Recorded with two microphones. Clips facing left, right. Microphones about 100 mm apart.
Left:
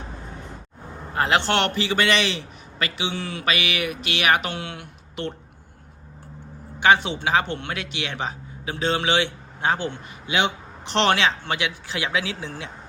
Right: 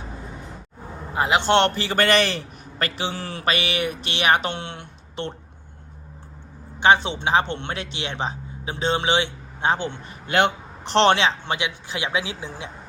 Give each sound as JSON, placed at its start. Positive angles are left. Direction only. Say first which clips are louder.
{"t": 1.1, "sound": "a man's voice", "louder": "right 2 dB", "side_deg": -15}
{"t": 1.7, "sound": "a man's voice", "louder": "right 2 dB", "side_deg": -40}
{"t": 6.7, "sound": "speech", "louder": "right 1 dB", "side_deg": -25}
{"t": 10.2, "sound": "a sound", "louder": "right 3 dB", "side_deg": -50}
{"t": 10.9, "sound": "speech", "louder": "right 3 dB", "side_deg": -25}